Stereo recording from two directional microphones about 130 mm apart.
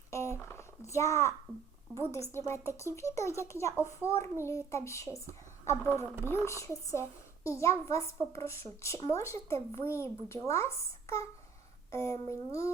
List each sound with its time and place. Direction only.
0.1 s a child's voice: 20° left (ahead or behind)
6.2 s speech: 20° left (ahead or behind)